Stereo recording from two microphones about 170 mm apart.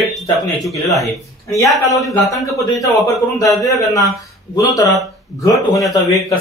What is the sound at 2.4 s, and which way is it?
Speech, 20° left (ahead or behind).